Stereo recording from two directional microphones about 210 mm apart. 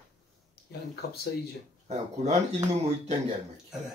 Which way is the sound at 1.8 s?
30° right (ahead or behind).